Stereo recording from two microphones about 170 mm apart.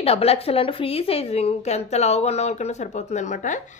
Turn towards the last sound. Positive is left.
turn(degrees=45)  # may be behind; listen again after turning